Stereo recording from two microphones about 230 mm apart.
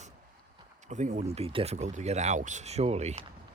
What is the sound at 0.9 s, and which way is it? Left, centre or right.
Speech, right.